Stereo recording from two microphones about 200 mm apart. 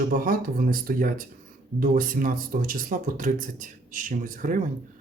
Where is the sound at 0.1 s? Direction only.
45° right (ahead or behind).